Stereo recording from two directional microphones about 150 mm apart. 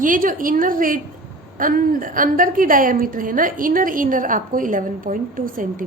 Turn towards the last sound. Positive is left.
turn(degrees=-65)  # may be behind; listen again after turning